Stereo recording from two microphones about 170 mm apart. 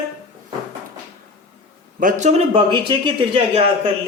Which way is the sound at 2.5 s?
30° right (ahead or behind).